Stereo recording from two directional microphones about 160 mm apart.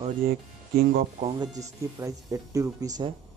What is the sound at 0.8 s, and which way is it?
Speech, 70° right (ahead or behind).